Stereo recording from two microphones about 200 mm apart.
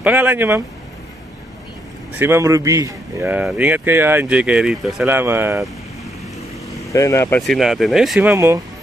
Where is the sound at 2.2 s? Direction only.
15° right (ahead or behind).